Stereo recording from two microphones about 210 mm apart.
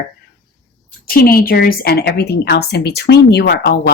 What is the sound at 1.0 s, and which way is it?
Speech, 45° left (ahead or behind).